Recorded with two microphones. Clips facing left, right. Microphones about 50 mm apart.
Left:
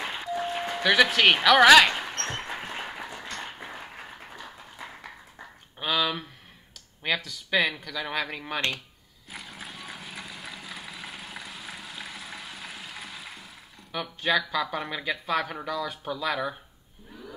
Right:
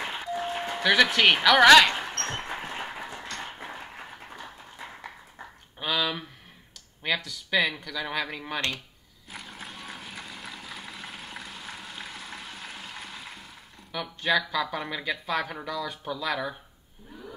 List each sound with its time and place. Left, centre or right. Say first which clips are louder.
0.2 s music: left 3 dB; centre
5.8 s a sound: left 1 dB; centre
7.0 s speech: even; centre
9.3 s vehicle: even; centre
13.9 s speech: even; centre